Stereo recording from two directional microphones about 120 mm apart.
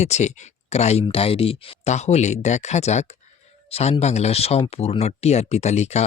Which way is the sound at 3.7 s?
60° left (ahead or behind).